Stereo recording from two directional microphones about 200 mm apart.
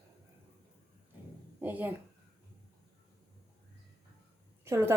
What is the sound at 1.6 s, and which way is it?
Speech, 10° right (ahead or behind).